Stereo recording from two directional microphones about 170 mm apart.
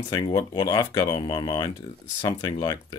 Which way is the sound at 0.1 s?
25° left (ahead or behind).